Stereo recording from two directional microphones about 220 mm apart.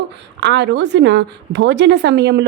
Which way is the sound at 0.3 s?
50° right (ahead or behind).